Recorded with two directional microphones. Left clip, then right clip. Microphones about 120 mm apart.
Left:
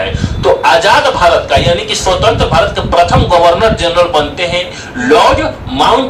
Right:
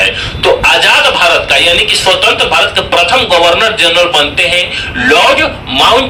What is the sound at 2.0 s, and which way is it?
Speech, 30° left (ahead or behind).